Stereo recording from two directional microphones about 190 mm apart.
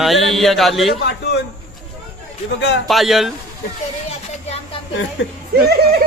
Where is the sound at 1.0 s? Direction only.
60° left (ahead or behind).